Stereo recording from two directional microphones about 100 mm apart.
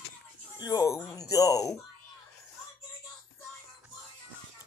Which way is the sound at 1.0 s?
35° left (ahead or behind).